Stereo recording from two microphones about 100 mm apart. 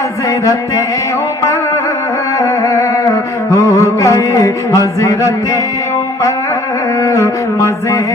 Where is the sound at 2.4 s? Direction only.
30° left (ahead or behind).